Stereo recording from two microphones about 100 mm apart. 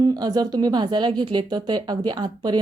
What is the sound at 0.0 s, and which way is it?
Speech, 40° right (ahead or behind).